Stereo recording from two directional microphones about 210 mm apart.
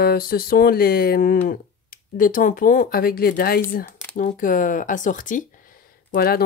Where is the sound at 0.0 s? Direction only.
45° left (ahead or behind).